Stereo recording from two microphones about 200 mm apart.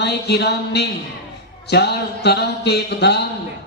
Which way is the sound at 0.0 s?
50° left (ahead or behind).